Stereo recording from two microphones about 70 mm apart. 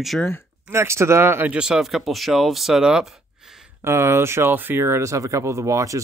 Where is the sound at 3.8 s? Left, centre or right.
Right.